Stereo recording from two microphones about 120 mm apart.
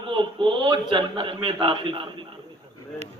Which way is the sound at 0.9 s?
45° right (ahead or behind).